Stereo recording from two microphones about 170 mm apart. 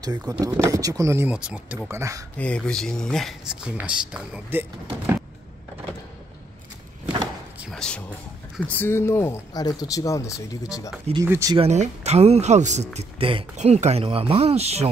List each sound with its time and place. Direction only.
0.0 s speech: 20° right (ahead or behind)
2.3 s speech: 5° left (ahead or behind)
7.6 s a sound: 5° left (ahead or behind)
8.5 s speech: 10° left (ahead or behind)
11.2 s speech: 15° right (ahead or behind)
11.5 s speech: 40° right (ahead or behind)
13.6 s speech: 40° right (ahead or behind)